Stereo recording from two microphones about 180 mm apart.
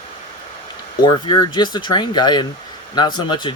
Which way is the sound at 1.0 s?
25° left (ahead or behind).